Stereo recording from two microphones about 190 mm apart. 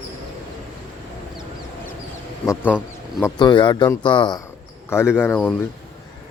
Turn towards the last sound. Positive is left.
turn(degrees=10)  # may be behind; listen again after turning